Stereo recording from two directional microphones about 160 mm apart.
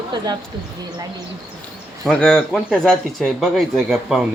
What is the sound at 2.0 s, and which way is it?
Speech, 5° left (ahead or behind).